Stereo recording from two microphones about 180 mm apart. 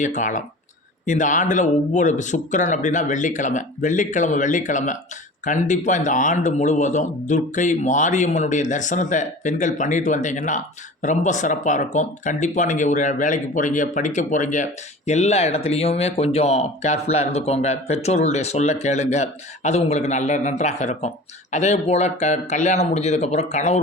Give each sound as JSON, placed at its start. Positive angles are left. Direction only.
{"t": 0.0, "sound": "speech", "side_deg": 45}